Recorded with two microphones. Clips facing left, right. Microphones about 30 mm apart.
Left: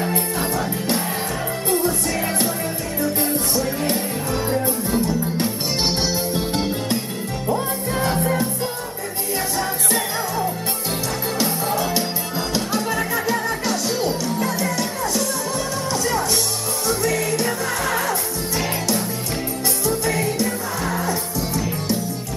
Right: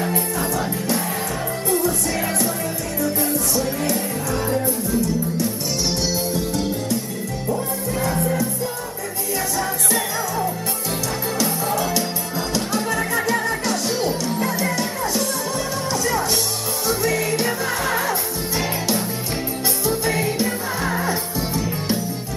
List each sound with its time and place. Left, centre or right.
0.1 s music: left
1.7 s music: left
3.9 s music: left
4.6 s music: left
11.4 s music: centre
12.5 s music: centre
19.9 s music: centre